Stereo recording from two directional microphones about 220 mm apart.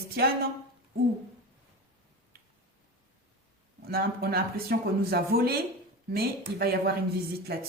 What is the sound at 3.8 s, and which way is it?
Speech, 45° right (ahead or behind).